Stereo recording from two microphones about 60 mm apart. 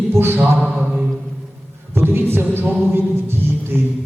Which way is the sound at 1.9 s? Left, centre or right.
Right.